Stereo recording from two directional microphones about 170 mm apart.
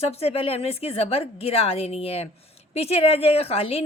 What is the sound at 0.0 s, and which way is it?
Speech, 35° left (ahead or behind).